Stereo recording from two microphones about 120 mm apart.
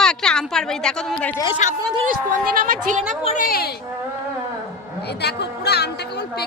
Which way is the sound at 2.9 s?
90° right.